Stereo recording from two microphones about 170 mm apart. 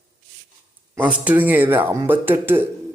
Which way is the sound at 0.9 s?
10° right (ahead or behind).